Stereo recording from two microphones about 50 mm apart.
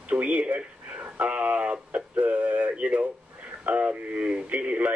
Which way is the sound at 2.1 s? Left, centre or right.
Right.